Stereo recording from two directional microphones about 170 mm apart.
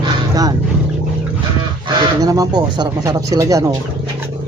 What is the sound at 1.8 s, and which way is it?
Speech, 20° right (ahead or behind).